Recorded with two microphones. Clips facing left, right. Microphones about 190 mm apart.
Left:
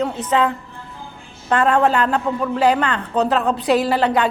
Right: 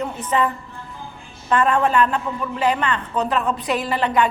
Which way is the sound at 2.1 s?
40° left (ahead or behind).